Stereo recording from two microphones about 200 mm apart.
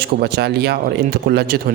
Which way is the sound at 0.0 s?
55° right (ahead or behind).